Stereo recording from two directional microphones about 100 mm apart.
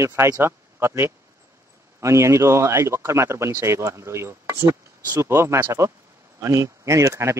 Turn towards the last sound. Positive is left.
turn(degrees=-30)  # may be behind; listen again after turning